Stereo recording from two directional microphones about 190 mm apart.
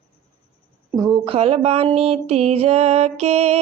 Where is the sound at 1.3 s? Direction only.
30° right (ahead or behind).